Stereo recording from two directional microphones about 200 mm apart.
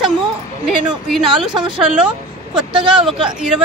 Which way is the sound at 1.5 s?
25° right (ahead or behind).